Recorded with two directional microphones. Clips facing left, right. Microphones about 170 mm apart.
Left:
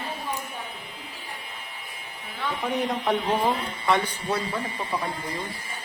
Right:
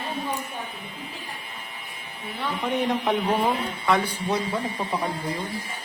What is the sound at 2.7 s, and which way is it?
Speech, 5° right (ahead or behind).